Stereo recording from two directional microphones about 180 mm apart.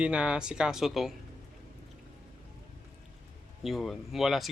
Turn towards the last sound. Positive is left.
turn(degrees=0)  # may be behind; listen again after turning